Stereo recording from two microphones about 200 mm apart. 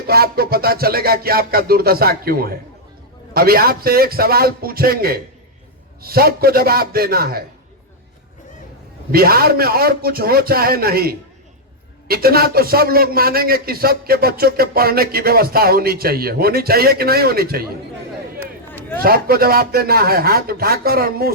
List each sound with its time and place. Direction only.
0.1 s a man's voice: 50° right (ahead or behind)
9.1 s a man's voice: 50° right (ahead or behind)
18.9 s a man's voice: 50° right (ahead or behind)